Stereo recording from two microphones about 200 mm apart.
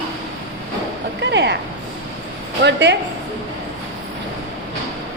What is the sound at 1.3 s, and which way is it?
Speech, 60° right (ahead or behind).